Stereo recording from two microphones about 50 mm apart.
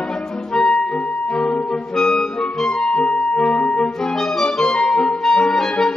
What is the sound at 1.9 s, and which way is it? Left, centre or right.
Music, centre.